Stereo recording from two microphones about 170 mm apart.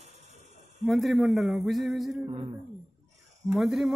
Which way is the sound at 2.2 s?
30° right (ahead or behind).